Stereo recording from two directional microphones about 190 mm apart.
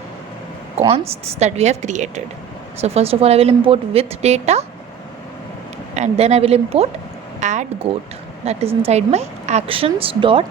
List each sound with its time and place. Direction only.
0.8 s a woman's voice: 30° right (ahead or behind)
5.9 s a woman's voice: 35° right (ahead or behind)